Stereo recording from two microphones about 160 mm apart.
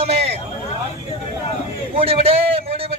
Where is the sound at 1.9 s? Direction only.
35° right (ahead or behind).